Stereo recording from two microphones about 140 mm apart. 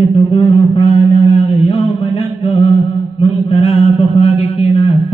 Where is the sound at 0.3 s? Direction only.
45° left (ahead or behind).